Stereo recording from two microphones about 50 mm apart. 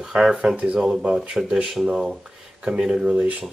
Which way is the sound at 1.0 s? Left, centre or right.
Right.